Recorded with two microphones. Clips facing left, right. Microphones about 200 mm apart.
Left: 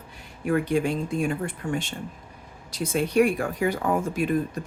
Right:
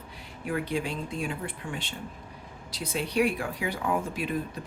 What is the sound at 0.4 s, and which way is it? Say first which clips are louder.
Speech: left 7 dB; 45° left (ahead or behind).